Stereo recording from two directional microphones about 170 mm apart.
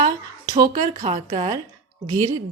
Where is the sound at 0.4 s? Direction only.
25° right (ahead or behind).